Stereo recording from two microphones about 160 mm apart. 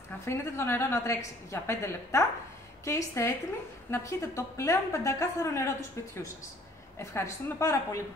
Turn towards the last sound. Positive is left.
turn(degrees=20)  # may be behind; listen again after turning